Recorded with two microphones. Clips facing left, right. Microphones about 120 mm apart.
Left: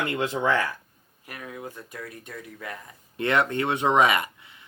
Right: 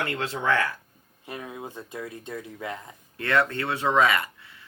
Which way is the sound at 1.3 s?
20° right (ahead or behind).